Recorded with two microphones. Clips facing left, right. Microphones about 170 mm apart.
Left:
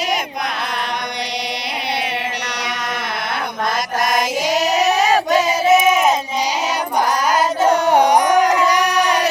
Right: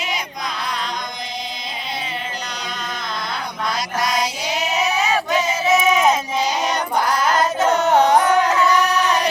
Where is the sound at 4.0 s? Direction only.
50° left (ahead or behind).